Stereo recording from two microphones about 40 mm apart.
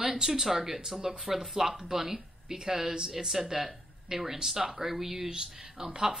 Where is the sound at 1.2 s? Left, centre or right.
Centre.